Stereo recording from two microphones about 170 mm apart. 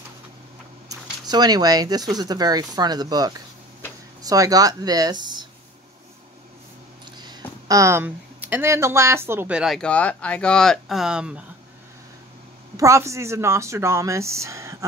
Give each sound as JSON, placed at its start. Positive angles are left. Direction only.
{"t": 0.8, "sound": "speech", "side_deg": -25}
{"t": 7.2, "sound": "speech", "side_deg": -25}
{"t": 12.7, "sound": "speech", "side_deg": -15}